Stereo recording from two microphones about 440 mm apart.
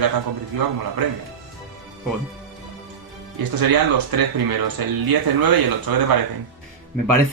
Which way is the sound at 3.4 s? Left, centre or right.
Right.